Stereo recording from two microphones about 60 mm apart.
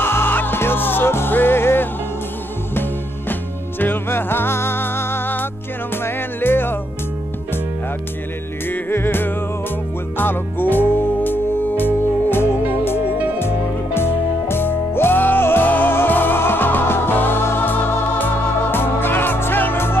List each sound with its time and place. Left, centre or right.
0.0 s music: left
8.6 s music: left
13.9 s music: left